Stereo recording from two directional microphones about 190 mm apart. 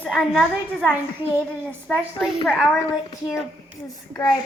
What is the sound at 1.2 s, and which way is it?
Speech, 10° right (ahead or behind).